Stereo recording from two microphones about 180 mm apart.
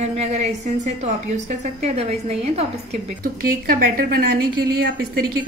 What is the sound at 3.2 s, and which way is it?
Speech, 55° right (ahead or behind).